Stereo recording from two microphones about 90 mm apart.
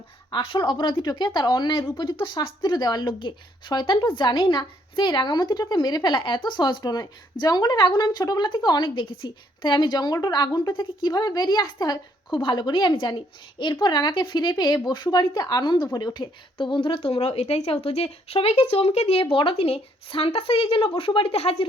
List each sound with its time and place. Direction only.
0.3 s a woman's voice: 60° left (ahead or behind); by 20.9 s 85° left
21.0 s speech: 70° left (ahead or behind)